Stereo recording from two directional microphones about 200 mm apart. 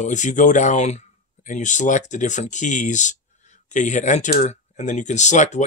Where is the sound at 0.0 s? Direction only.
40° left (ahead or behind).